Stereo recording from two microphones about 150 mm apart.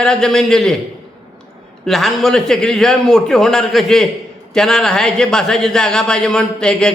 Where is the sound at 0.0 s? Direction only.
5° left (ahead or behind).